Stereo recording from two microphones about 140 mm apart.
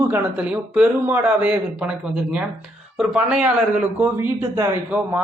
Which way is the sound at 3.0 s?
5° right (ahead or behind).